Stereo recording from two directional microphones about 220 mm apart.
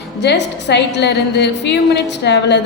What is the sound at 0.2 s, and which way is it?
A woman's voice, 50° left (ahead or behind).